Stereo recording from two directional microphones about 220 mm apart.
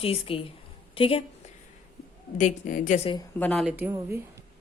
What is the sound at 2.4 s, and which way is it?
Speech, 35° left (ahead or behind).